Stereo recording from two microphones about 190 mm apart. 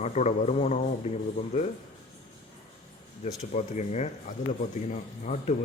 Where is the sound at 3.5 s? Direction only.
35° left (ahead or behind).